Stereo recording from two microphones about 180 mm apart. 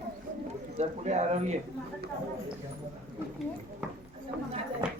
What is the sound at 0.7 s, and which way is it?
Speech, 40° right (ahead or behind).